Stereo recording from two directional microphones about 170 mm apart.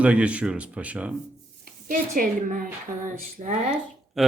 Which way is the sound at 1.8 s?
55° right (ahead or behind).